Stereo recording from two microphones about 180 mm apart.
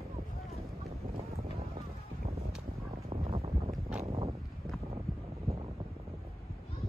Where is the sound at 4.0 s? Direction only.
35° right (ahead or behind).